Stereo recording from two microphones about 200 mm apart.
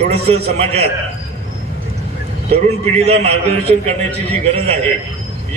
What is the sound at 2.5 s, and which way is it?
A man's voice, 30° right (ahead or behind).